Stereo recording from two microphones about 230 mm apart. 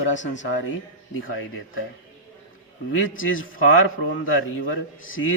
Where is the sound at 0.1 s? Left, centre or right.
Left.